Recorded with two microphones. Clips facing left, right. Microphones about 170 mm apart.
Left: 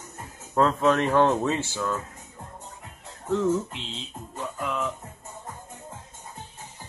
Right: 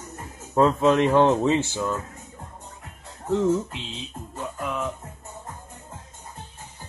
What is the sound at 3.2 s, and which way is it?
Speech, 15° right (ahead or behind).